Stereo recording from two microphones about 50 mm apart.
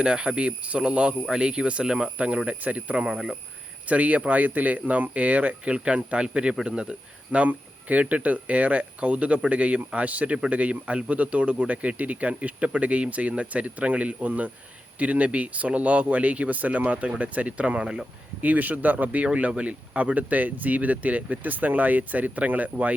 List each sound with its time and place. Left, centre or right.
0.0 s speech: centre
2.9 s speech: centre
3.8 s speech: right